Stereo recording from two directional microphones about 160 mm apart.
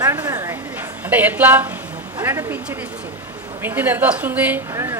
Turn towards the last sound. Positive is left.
turn(degrees=-20)  # may be behind; listen again after turning